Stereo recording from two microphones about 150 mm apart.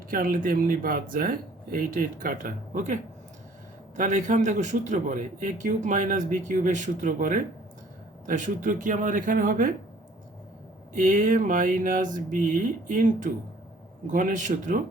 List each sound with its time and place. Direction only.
0.1 s a man's voice: 70° right (ahead or behind)
10.9 s a man's voice: 60° right (ahead or behind)